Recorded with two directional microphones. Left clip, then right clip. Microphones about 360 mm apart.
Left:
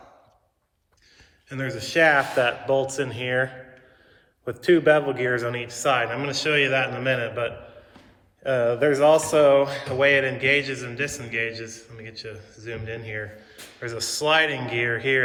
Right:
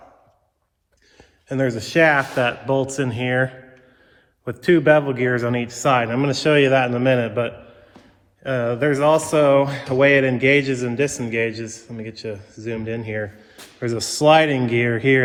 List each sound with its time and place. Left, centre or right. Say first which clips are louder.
1.5 s a man's voice: right 8 dB; centre
4.6 s a man's voice: right 3 dB; centre